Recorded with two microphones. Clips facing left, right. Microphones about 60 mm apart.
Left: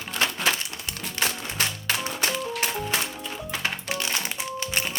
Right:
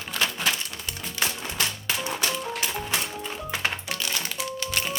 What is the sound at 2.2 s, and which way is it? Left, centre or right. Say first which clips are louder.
Music: left 1 dB; left.